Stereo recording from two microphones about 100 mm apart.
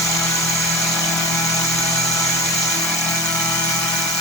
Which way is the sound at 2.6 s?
5° left (ahead or behind).